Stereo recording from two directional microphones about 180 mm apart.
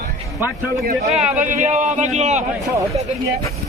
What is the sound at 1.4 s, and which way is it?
A man's voice, 45° right (ahead or behind).